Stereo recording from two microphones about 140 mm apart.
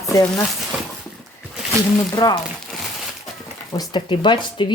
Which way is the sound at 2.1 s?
30° left (ahead or behind).